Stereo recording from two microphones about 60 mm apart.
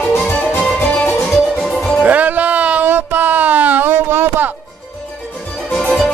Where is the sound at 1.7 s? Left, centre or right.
Centre.